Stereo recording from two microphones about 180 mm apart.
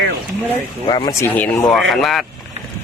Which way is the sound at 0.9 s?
25° left (ahead or behind).